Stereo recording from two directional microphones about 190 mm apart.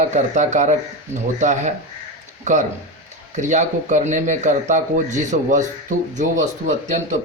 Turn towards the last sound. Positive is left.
turn(degrees=-40)  # may be behind; listen again after turning